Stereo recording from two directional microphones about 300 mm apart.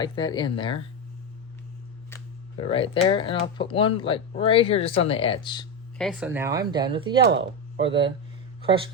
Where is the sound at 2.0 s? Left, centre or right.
Centre.